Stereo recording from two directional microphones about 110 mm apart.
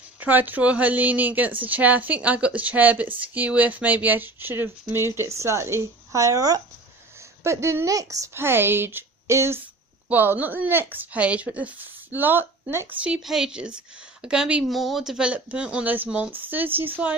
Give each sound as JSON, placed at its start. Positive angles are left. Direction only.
{"t": 0.2, "sound": "a woman's voice", "side_deg": -15}
{"t": 13.0, "sound": "a woman's voice", "side_deg": -5}